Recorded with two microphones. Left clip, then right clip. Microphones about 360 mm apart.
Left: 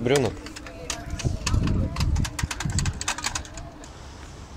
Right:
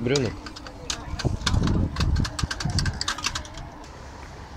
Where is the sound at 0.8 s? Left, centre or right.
Centre.